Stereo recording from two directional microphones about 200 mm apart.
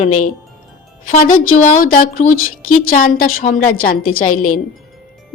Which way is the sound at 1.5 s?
40° left (ahead or behind).